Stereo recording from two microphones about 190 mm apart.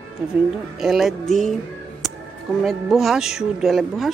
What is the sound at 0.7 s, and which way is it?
Speech, centre (ahead or behind).